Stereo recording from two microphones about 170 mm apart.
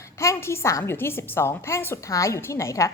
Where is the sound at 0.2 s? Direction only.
15° left (ahead or behind).